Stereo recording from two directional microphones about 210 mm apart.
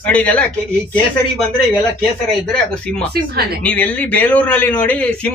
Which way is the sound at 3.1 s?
50° right (ahead or behind).